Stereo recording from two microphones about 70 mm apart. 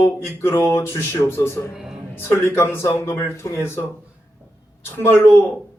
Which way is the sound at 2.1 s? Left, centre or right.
Left.